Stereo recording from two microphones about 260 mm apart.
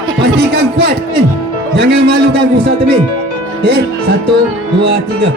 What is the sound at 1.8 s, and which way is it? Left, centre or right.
Music, right.